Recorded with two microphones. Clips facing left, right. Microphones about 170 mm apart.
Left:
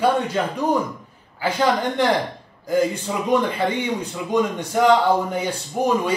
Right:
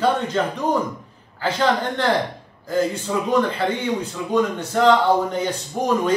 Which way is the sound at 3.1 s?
5° left (ahead or behind).